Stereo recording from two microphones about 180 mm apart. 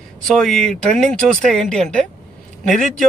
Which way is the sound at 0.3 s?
5° left (ahead or behind).